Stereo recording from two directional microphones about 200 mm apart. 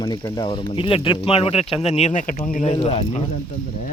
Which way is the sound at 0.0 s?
20° left (ahead or behind).